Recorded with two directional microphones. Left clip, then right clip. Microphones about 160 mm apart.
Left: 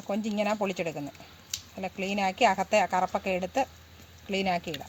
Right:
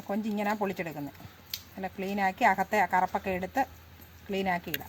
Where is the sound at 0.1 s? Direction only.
30° left (ahead or behind).